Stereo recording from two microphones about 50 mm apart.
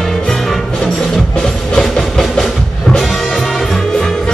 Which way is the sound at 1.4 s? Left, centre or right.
Centre.